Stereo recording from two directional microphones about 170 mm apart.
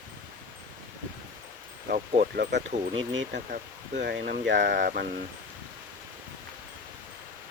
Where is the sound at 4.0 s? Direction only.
85° right; by 5.2 s 65° right (ahead or behind).